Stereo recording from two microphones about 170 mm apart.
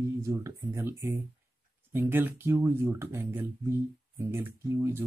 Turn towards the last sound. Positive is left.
turn(degrees=-15)  # may be behind; listen again after turning